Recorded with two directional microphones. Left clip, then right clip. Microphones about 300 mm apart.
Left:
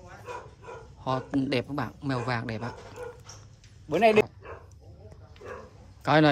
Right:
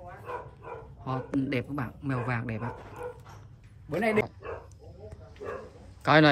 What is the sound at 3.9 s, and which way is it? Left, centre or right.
Speech, centre.